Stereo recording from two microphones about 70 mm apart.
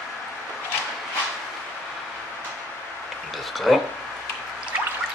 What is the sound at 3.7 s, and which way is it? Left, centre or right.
Speech, centre.